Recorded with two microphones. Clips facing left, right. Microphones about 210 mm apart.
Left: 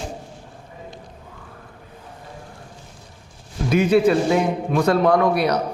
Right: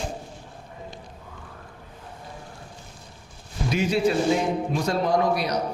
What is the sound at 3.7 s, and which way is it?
A man's voice, 55° left (ahead or behind).